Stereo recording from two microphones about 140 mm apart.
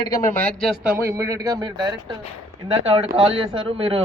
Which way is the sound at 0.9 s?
20° right (ahead or behind).